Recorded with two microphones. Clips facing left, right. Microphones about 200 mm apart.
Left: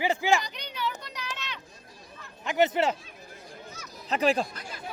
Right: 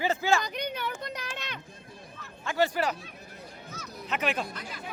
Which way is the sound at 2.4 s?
20° left (ahead or behind).